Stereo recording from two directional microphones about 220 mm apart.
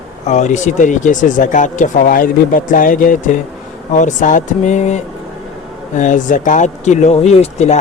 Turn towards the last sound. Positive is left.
turn(degrees=30)  # may be behind; listen again after turning